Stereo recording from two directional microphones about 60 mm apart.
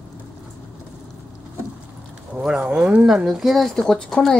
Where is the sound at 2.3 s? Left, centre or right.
Centre.